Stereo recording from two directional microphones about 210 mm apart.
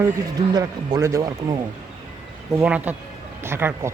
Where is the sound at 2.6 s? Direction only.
5° right (ahead or behind).